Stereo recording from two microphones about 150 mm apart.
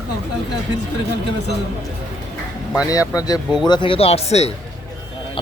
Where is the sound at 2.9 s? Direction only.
25° left (ahead or behind).